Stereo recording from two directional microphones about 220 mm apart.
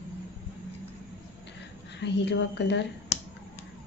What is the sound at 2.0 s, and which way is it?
Speech, 50° left (ahead or behind).